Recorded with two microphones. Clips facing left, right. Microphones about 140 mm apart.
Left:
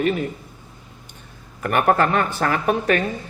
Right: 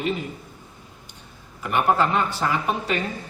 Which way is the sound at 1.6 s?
55° left (ahead or behind).